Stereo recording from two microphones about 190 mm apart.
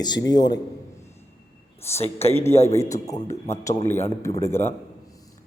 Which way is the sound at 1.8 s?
35° left (ahead or behind).